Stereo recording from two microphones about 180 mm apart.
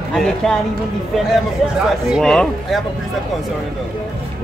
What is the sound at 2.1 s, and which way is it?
Speech, centre (ahead or behind).